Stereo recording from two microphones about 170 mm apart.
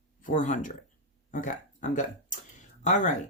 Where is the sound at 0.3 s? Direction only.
45° left (ahead or behind).